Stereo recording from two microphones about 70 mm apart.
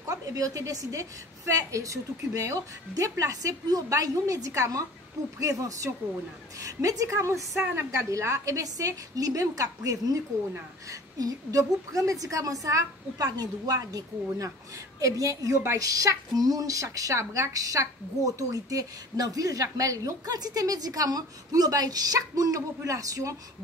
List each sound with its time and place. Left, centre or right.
0.1 s a woman's voice: right